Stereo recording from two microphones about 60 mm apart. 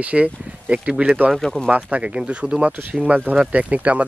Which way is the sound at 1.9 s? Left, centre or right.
Right.